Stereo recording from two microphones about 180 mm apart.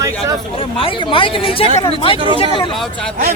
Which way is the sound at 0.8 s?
30° left (ahead or behind).